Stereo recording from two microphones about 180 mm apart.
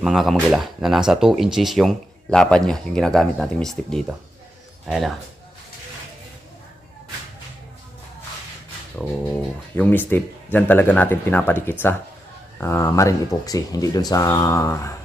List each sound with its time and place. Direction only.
0.0 s speech: centre (ahead or behind)
9.7 s speech: 10° left (ahead or behind)